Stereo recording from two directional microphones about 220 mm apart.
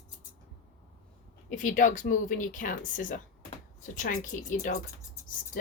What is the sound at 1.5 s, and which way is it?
Speech, 35° left (ahead or behind).